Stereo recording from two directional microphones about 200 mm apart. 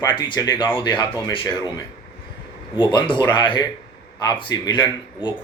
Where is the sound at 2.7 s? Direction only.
25° left (ahead or behind).